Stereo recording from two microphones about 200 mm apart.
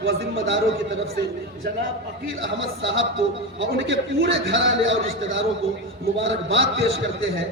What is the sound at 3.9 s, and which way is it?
A man's voice, 60° right (ahead or behind).